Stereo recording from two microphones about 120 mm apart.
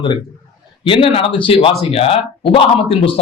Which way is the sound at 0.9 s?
50° left (ahead or behind).